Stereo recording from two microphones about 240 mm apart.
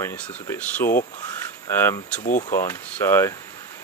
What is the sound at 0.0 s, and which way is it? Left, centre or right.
Speech, centre.